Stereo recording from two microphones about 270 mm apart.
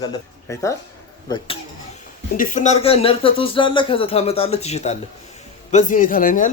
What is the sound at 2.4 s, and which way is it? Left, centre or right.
Speech, left.